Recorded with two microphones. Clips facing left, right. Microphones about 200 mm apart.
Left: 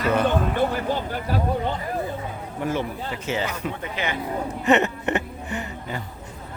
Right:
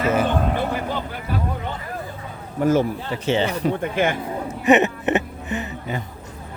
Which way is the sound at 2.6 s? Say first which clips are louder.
Right 8 dB; 40° right (ahead or behind).